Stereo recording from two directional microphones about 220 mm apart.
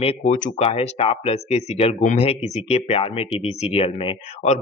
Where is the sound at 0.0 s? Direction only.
30° left (ahead or behind).